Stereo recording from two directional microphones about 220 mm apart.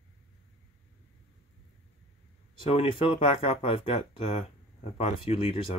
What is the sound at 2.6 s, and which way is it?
Speech, 25° left (ahead or behind).